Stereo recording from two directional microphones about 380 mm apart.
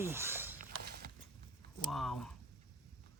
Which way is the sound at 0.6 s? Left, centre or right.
Right.